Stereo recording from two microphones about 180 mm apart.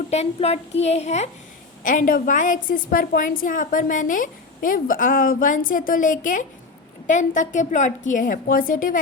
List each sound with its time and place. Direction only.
0.1 s a woman's voice: 35° left (ahead or behind)
1.8 s a woman's voice: 50° left (ahead or behind)